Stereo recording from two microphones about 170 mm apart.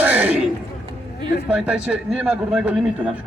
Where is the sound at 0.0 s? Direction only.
10° right (ahead or behind).